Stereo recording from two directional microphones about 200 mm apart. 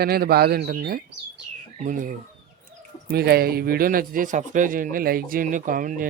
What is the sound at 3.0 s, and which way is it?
Speech, 50° right (ahead or behind).